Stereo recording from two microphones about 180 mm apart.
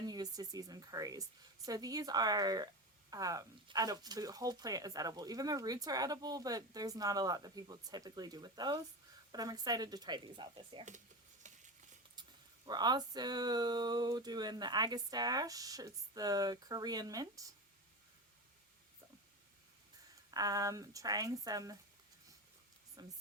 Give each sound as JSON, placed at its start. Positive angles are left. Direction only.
{"t": 0.0, "sound": "speech", "side_deg": -20}
{"t": 11.4, "sound": "a sound", "side_deg": -45}
{"t": 12.6, "sound": "speech", "side_deg": -25}
{"t": 20.3, "sound": "speech", "side_deg": -20}
{"t": 23.0, "sound": "speech", "side_deg": -20}